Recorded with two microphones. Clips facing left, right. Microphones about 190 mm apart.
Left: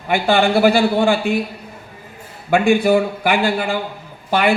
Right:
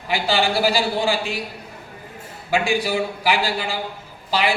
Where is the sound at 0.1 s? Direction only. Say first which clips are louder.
Left 6 dB; 55° left (ahead or behind).